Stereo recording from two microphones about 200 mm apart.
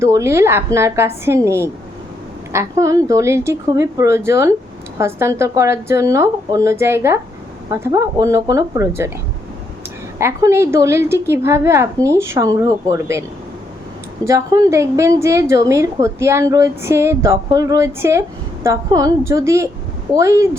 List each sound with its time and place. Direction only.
0.0 s a woman's voice: 15° right (ahead or behind)
10.2 s a woman's voice: 15° right (ahead or behind)
14.3 s a woman's voice: 15° right (ahead or behind)